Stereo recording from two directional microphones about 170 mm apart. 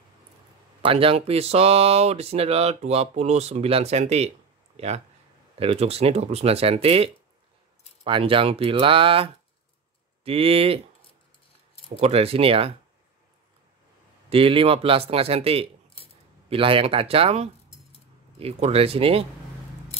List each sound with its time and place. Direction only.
0.8 s speech: 35° right (ahead or behind)
11.9 s speech: 35° right (ahead or behind)
14.3 s speech: 35° right (ahead or behind)